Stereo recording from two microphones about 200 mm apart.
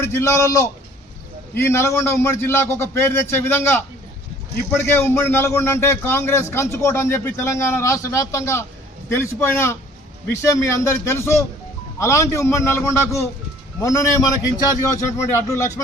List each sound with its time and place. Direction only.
0.0 s a man's voice: 15° left (ahead or behind)